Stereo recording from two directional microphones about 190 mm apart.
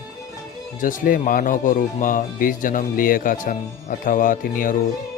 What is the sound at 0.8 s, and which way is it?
Speech, 45° left (ahead or behind).